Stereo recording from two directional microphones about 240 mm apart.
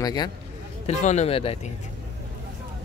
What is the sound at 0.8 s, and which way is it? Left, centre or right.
Speech, left.